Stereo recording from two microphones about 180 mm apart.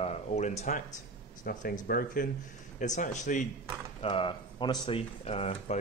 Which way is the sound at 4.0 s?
30° left (ahead or behind).